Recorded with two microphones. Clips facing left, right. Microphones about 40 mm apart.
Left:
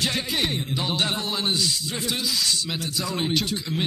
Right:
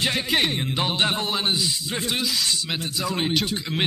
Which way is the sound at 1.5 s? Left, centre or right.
Right.